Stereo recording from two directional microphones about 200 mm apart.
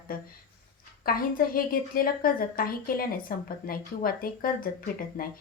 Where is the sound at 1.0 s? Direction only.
45° left (ahead or behind).